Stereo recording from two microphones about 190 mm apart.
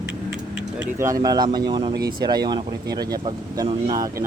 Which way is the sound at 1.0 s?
15° right (ahead or behind).